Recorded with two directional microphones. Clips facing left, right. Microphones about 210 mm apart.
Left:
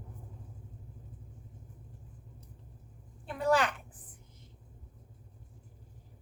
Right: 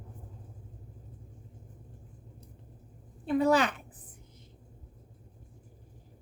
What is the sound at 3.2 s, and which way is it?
Speech, 20° right (ahead or behind).